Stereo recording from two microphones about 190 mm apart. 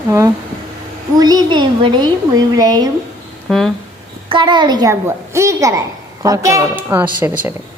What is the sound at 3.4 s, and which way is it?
Speech, centre (ahead or behind).